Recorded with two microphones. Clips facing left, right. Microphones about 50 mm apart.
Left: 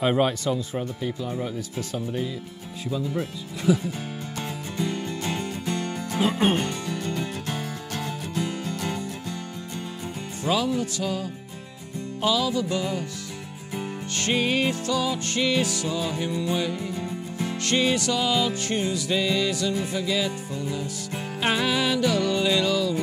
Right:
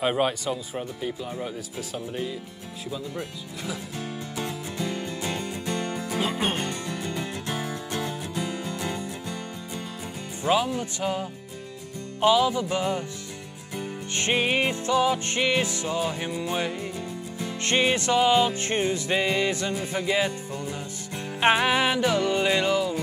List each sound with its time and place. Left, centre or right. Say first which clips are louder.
0.0 s speech: left 2 dB; centre
4.7 s music: left 4 dB; centre
10.4 s speech: right 1 dB; centre
10.8 s music: left 1 dB; right
14.1 s music: even; right
21.4 s music: right 3 dB; right